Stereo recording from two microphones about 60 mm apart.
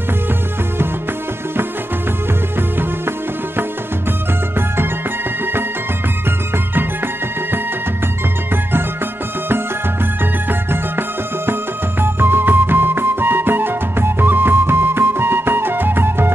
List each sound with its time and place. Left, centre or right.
2.8 s music: right
10.5 s music: right